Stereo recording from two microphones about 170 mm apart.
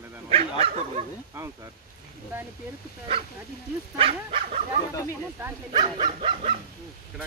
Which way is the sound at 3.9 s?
30° right (ahead or behind).